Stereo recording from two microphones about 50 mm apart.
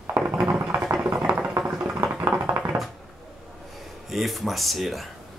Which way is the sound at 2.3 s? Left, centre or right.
Right.